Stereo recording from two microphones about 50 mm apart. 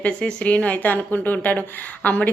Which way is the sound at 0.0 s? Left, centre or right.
Left.